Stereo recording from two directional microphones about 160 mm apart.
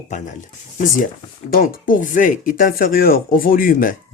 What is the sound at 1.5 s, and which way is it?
Speech, 65° left (ahead or behind).